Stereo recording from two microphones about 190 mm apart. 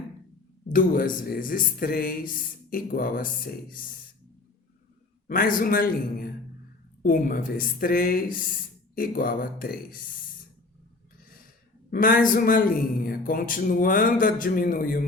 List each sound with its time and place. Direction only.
0.7 s speech: 45° left (ahead or behind)
5.3 s speech: 45° left (ahead or behind)
11.9 s speech: 45° left (ahead or behind)